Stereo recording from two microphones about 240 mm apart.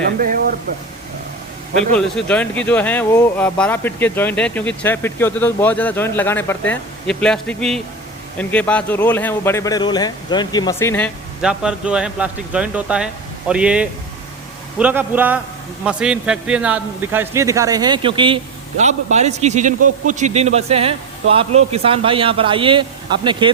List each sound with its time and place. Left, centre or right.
0.2 s speech: right
2.0 s a man's voice: centre